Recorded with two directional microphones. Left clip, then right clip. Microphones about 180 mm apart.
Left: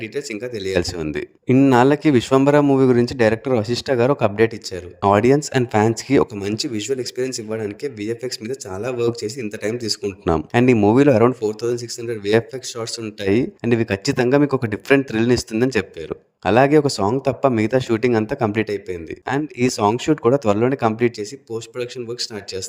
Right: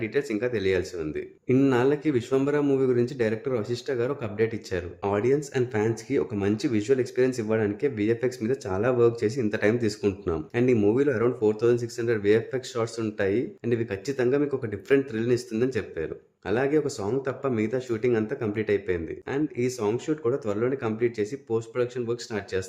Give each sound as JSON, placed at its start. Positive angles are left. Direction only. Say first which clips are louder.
{"t": 0.0, "sound": "speech", "louder": "even", "side_deg": 50}
{"t": 1.8, "sound": "speech", "louder": "left 9 dB", "side_deg": 50}
{"t": 6.9, "sound": "speech", "louder": "right 1 dB", "side_deg": 0}
{"t": 9.0, "sound": "speech", "louder": "left 2 dB", "side_deg": 50}
{"t": 9.5, "sound": "speech", "louder": "right 2 dB", "side_deg": 0}
{"t": 9.7, "sound": "speech", "louder": "left 2 dB", "side_deg": 50}
{"t": 10.2, "sound": "speech", "louder": "left 11 dB", "side_deg": 55}